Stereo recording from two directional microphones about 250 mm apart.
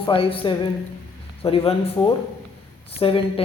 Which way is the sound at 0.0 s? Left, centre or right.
Left.